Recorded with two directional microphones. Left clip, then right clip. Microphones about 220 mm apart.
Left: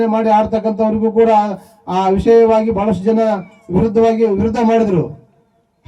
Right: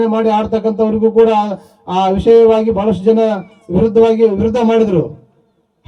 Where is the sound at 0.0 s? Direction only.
25° right (ahead or behind).